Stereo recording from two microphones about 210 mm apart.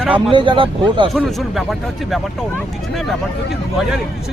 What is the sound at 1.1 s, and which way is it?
Speech, centre (ahead or behind).